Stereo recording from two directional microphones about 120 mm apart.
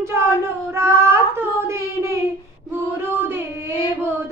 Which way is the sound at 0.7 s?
20° right (ahead or behind).